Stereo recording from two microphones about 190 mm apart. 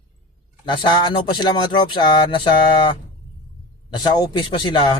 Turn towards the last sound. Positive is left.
turn(degrees=25)  # may be behind; listen again after turning